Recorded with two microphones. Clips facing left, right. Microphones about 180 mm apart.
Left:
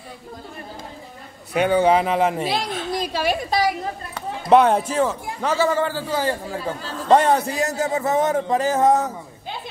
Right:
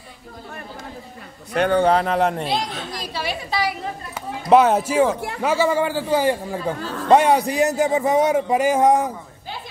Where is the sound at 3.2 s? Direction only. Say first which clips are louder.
Left 3 dB; 45° left (ahead or behind).